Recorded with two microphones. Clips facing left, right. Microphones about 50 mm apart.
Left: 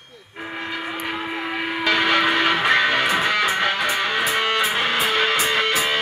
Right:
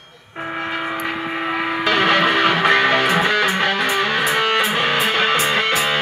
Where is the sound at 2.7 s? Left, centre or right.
Right.